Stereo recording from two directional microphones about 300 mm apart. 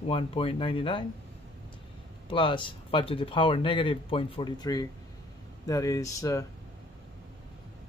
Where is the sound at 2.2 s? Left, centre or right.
Centre.